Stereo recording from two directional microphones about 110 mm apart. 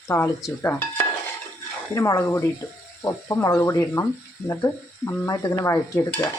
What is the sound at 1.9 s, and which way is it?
Speech, 30° left (ahead or behind).